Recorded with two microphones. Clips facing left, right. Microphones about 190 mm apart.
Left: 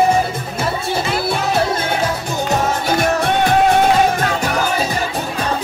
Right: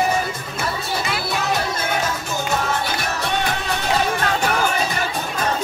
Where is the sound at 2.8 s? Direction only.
45° left (ahead or behind).